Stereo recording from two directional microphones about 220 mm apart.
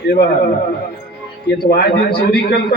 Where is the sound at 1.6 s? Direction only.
45° left (ahead or behind).